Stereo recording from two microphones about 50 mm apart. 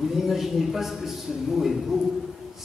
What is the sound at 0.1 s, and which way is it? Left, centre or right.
A man's voice, centre.